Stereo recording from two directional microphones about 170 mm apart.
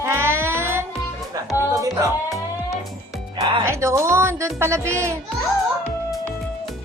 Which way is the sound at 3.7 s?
15° right (ahead or behind).